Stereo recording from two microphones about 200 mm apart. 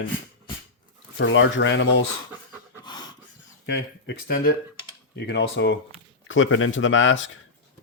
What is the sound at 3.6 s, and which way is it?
Speech, 60° left (ahead or behind).